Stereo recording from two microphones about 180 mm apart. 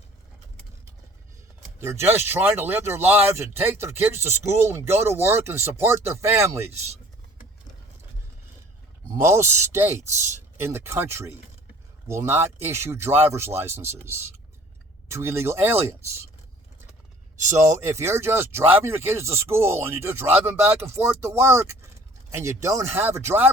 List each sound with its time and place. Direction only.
1.8 s speech: 15° right (ahead or behind)
9.0 s a man's voice: 15° right (ahead or behind)
15.1 s speech: 15° right (ahead or behind)
17.8 s speech: 15° right (ahead or behind)